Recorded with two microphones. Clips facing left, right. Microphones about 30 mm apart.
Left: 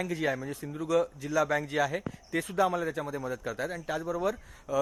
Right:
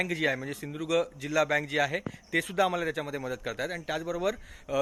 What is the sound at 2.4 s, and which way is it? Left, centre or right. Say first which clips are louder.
A man's voice: left 1 dB; right.